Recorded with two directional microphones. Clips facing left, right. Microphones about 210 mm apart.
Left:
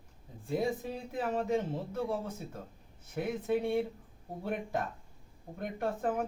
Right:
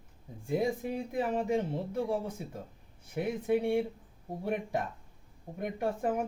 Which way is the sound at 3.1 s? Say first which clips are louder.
Right 2 dB; 15° right (ahead or behind).